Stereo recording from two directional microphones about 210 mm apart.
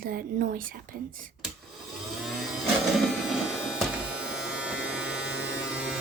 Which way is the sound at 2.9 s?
Centre (ahead or behind).